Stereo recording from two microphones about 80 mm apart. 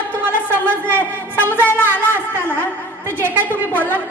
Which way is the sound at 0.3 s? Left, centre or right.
Right.